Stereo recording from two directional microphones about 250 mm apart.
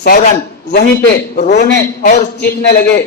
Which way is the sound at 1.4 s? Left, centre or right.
Left.